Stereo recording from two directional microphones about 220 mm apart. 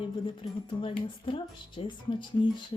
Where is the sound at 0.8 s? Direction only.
25° left (ahead or behind).